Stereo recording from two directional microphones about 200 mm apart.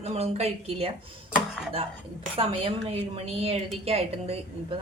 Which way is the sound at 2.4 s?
30° right (ahead or behind).